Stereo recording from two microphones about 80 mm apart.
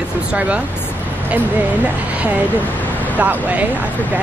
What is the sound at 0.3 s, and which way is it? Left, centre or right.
Speech, centre.